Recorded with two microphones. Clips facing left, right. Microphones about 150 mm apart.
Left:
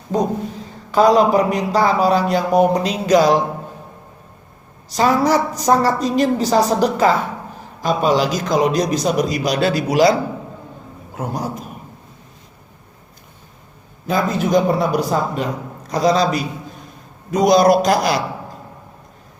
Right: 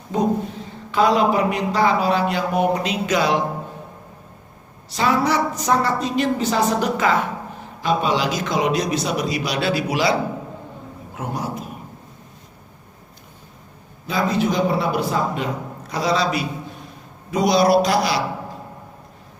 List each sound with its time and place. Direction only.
0.1 s a man's voice: 40° left (ahead or behind)
4.9 s a man's voice: 40° left (ahead or behind)
11.2 s a man's voice: 40° left (ahead or behind)
14.1 s a man's voice: 45° left (ahead or behind)